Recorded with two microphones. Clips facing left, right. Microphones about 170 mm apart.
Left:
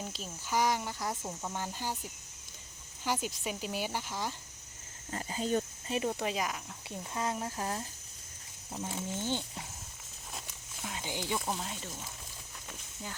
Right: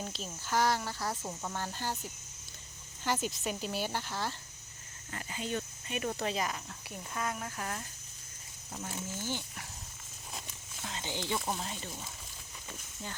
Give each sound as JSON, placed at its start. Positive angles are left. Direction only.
{"t": 0.0, "sound": "speech", "side_deg": 10}
{"t": 1.2, "sound": "speech", "side_deg": 5}
{"t": 3.0, "sound": "speech", "side_deg": 10}
{"t": 5.1, "sound": "speech", "side_deg": 35}
{"t": 6.1, "sound": "speech", "side_deg": 10}
{"t": 6.8, "sound": "speech", "side_deg": 25}
{"t": 8.7, "sound": "speech", "side_deg": 15}
{"t": 10.4, "sound": "speech", "side_deg": 10}